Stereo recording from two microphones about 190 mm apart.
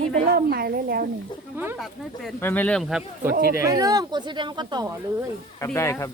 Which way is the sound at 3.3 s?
50° right (ahead or behind).